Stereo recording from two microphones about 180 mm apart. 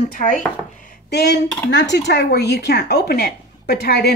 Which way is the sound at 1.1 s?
65° left (ahead or behind).